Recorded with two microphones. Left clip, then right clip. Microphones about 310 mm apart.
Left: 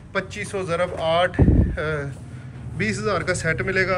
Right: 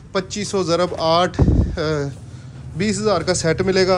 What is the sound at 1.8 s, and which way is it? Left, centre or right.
A man's voice, centre.